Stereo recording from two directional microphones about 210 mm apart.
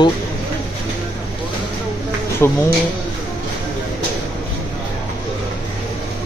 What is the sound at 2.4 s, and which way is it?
Speech, 10° left (ahead or behind).